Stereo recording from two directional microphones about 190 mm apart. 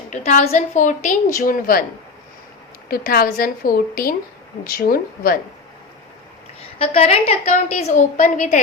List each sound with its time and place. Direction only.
0.1 s a woman's voice: 40° left (ahead or behind)
2.9 s a woman's voice: 50° left (ahead or behind)
6.7 s a woman's voice: 30° left (ahead or behind)